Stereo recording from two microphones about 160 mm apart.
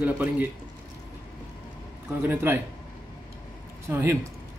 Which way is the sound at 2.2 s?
15° right (ahead or behind).